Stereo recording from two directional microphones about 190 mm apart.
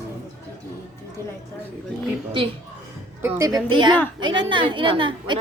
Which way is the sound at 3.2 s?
15° right (ahead or behind).